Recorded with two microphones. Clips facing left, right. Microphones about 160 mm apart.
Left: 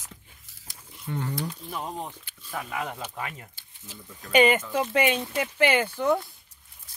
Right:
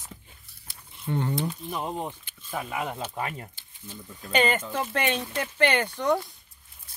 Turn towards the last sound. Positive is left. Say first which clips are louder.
# left 1 dB
turn(degrees=0)  # may be behind; listen again after turning